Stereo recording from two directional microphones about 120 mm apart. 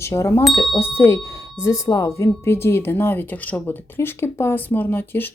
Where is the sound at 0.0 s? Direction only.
20° left (ahead or behind).